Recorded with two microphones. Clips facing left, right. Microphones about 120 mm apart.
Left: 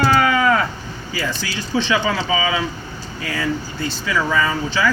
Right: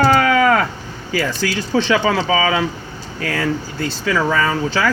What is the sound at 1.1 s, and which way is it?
A man's voice, 65° right (ahead or behind).